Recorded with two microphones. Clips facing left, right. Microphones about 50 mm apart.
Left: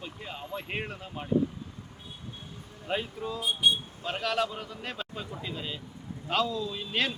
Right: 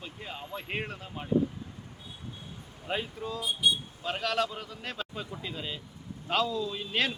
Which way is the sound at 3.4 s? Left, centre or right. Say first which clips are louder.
Left 2 dB; left.